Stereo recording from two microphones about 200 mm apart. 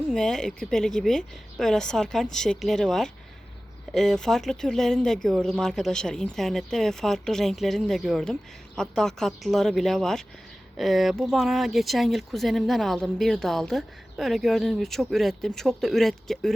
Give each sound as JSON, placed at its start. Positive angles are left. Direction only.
{"t": 0.1, "sound": "speech", "side_deg": 0}